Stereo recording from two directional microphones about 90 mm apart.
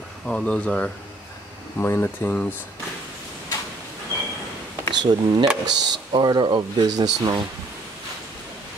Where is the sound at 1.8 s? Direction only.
25° left (ahead or behind).